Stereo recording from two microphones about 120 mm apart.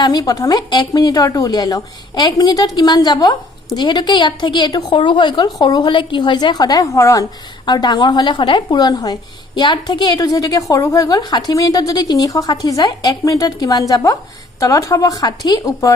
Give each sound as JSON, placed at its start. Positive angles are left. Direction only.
{"t": 0.0, "sound": "a woman's voice", "side_deg": 35}